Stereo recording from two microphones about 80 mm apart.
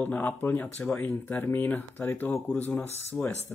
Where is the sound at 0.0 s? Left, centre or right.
Left.